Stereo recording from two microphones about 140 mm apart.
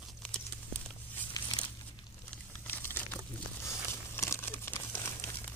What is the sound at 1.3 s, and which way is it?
Crumpling, 30° left (ahead or behind).